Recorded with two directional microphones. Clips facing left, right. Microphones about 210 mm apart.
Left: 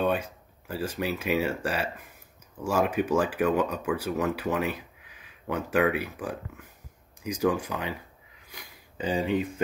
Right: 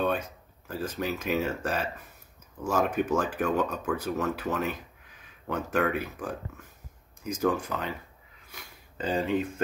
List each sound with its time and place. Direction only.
0.0 s speech: 10° left (ahead or behind)